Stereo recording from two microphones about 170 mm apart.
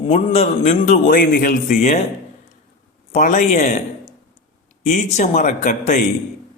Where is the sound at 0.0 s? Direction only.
40° left (ahead or behind).